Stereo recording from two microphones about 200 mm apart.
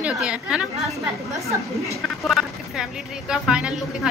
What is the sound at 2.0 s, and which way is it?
A woman's voice, centre (ahead or behind).